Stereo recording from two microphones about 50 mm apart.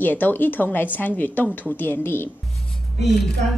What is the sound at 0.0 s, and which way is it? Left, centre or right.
A woman's voice, left.